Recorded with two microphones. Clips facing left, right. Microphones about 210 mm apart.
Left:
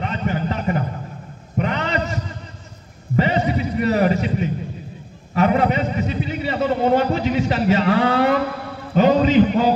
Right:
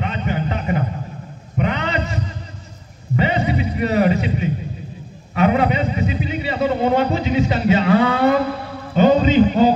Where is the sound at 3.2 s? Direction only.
40° left (ahead or behind).